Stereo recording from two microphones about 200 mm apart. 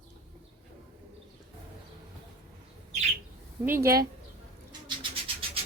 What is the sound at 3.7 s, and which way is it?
Speech, 15° right (ahead or behind).